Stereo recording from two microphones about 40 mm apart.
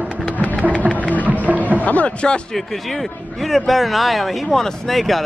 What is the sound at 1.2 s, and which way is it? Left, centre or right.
Speech, right.